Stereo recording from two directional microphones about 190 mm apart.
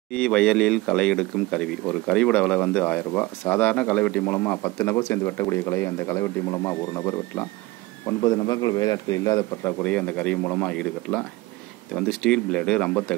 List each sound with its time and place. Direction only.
0.1 s speech: 5° left (ahead or behind)